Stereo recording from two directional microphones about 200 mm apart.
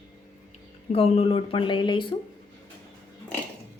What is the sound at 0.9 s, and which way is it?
Speech, 30° left (ahead or behind).